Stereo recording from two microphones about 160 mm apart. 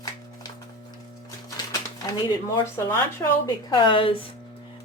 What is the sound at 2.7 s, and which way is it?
Speech, 15° left (ahead or behind).